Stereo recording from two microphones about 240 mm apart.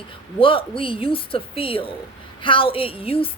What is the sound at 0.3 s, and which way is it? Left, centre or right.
Speech, left.